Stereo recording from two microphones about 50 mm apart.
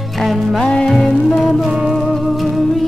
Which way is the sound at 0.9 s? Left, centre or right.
Centre.